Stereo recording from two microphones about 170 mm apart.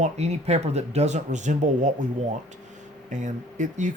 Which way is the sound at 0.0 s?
40° right (ahead or behind).